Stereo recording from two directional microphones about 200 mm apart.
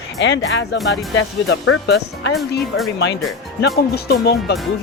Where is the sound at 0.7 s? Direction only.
Centre (ahead or behind).